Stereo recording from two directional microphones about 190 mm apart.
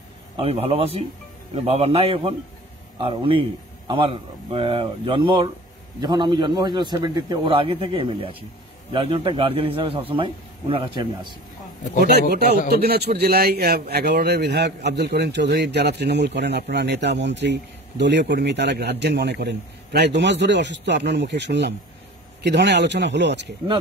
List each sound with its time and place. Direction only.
0.4 s a man's voice: 30° right (ahead or behind)
12.0 s a man's voice: 55° right (ahead or behind)